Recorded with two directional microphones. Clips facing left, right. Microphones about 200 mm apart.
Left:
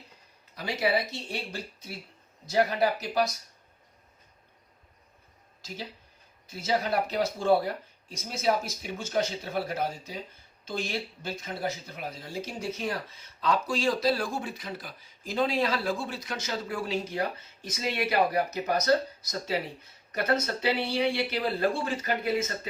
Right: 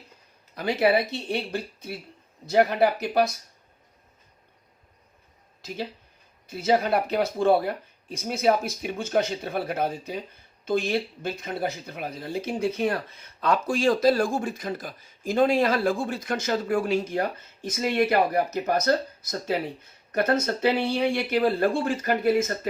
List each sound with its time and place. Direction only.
0.5 s a man's voice: 55° right (ahead or behind)
5.6 s a man's voice: 60° right (ahead or behind)